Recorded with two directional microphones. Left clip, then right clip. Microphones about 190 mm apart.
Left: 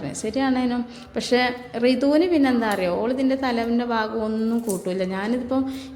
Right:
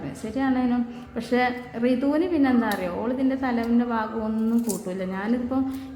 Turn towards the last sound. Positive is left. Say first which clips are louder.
# left 2 dB
turn(degrees=15)  # may be behind; listen again after turning